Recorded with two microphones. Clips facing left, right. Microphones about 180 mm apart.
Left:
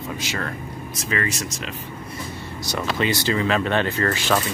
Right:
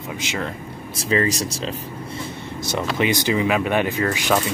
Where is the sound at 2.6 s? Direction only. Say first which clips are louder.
Right 2 dB; 20° right (ahead or behind).